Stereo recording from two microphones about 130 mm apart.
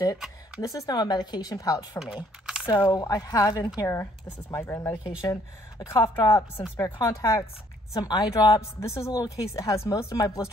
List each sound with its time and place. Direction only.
0.6 s a woman's voice: 25° left (ahead or behind)